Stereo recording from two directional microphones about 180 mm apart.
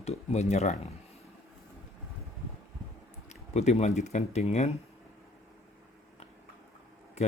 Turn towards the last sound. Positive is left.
turn(degrees=40)  # may be behind; listen again after turning